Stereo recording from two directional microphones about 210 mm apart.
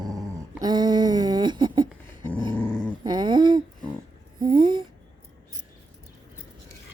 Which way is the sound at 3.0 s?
20° right (ahead or behind).